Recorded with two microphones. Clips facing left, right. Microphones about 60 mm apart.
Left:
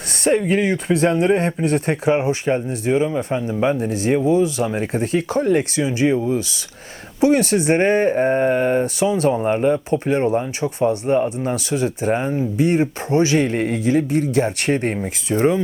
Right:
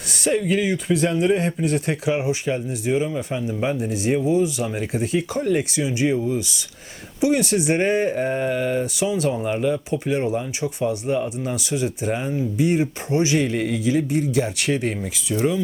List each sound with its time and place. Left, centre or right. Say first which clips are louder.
0.3 s speech: left 3 dB; left